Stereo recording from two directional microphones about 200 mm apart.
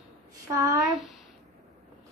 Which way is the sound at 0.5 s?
15° right (ahead or behind).